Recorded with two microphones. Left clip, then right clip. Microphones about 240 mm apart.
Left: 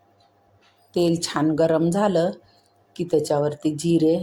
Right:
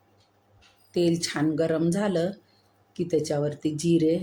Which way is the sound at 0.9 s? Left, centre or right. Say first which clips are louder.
Left 3 dB; centre.